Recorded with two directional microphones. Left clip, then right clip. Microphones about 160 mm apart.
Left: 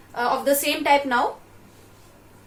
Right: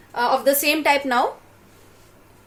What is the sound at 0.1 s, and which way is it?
A woman's voice, 55° right (ahead or behind).